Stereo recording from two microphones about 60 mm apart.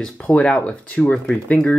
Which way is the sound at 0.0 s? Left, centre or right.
Centre.